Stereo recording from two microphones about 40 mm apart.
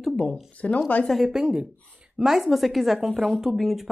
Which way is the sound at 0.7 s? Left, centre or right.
Left.